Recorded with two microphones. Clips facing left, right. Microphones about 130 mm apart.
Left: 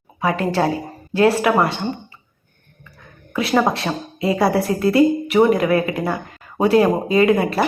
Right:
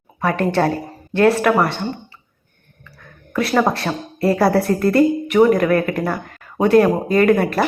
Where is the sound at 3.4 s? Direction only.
25° left (ahead or behind).